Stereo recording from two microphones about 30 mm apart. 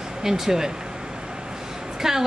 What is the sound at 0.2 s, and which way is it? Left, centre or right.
Speech, centre.